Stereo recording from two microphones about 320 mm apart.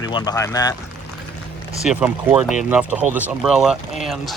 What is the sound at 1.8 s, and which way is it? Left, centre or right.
Speech, centre.